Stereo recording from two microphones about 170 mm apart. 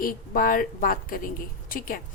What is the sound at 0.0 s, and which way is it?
Speech, 55° left (ahead or behind).